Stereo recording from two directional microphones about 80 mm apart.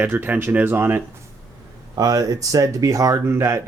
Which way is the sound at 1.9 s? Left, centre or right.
Right.